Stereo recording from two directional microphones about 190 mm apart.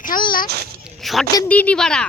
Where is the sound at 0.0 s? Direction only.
45° left (ahead or behind).